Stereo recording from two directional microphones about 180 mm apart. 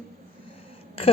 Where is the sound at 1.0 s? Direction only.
30° left (ahead or behind).